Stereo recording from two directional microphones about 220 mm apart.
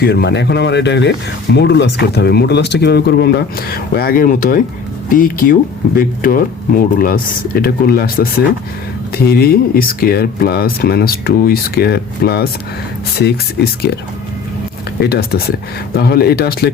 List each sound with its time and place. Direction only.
0.0 s speech: 50° left (ahead or behind)
15.0 s speech: 45° left (ahead or behind)